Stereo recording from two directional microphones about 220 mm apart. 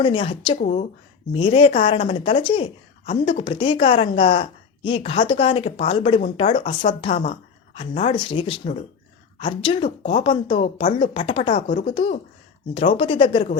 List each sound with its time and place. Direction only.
0.0 s a woman's voice: 25° left (ahead or behind)
12.7 s a woman's voice: 25° left (ahead or behind)